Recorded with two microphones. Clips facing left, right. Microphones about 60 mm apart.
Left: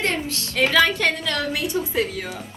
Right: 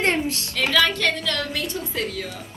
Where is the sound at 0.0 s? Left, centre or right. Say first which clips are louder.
Right 3 dB; right.